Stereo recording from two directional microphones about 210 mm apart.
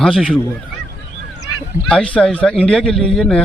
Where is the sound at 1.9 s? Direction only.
5° left (ahead or behind).